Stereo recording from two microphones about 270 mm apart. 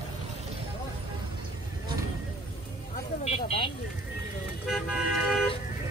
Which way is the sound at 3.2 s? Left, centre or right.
Left.